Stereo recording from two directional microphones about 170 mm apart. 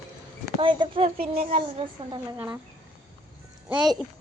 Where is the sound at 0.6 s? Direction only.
30° right (ahead or behind).